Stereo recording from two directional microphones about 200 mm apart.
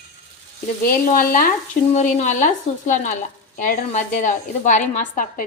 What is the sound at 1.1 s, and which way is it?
A woman's voice, 45° left (ahead or behind).